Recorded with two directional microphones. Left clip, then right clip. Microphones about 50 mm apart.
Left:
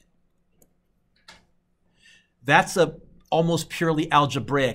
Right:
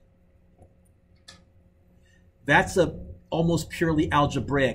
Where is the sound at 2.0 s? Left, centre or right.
Left.